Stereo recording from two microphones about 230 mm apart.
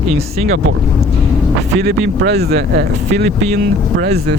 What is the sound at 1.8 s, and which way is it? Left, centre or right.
Speech, right.